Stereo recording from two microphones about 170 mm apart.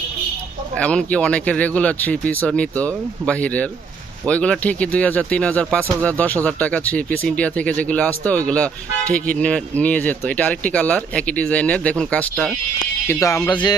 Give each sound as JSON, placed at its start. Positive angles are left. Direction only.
{"t": 0.8, "sound": "speech", "side_deg": 5}
{"t": 13.1, "sound": "speech", "side_deg": 15}